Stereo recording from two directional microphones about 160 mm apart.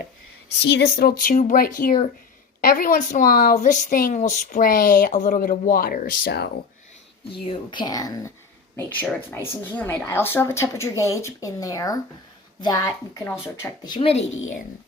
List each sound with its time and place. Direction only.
0.6 s speech: 85° left
7.4 s speech: 30° left (ahead or behind)
9.7 s speech: 15° left (ahead or behind); by 14.3 s 35° left (ahead or behind)